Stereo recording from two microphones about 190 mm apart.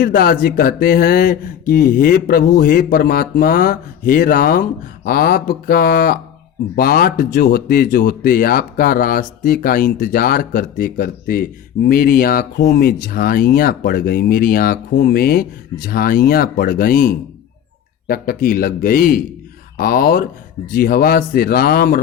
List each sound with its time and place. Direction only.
0.0 s speech: 50° left (ahead or behind)